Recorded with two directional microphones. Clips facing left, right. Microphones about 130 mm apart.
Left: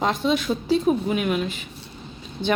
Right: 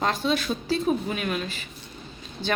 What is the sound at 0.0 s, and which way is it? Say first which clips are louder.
Speech: left 3 dB; 15° left (ahead or behind).